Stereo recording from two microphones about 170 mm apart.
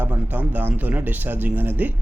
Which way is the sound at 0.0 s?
10° right (ahead or behind).